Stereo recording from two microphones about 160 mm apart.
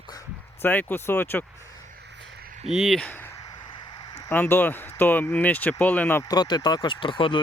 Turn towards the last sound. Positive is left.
turn(degrees=30)  # may be behind; listen again after turning